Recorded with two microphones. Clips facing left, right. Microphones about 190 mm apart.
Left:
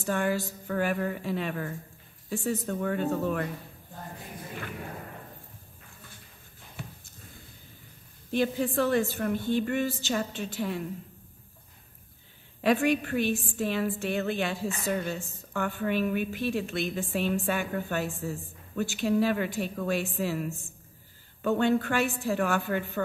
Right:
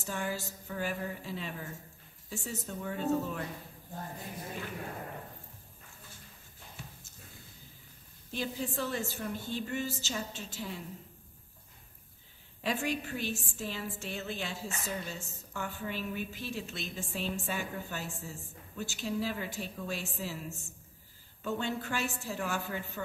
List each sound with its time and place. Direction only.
0.0 s a woman's voice: 60° left (ahead or behind)
6.8 s a sound: 60° left (ahead or behind)
8.3 s a woman's voice: 60° left (ahead or behind)
12.6 s a woman's voice: 65° left (ahead or behind)